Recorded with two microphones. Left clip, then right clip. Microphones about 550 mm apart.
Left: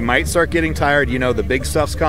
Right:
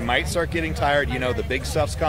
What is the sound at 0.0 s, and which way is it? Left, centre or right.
Speech, left.